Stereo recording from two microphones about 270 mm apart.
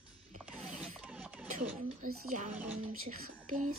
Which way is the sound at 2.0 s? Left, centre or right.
Right.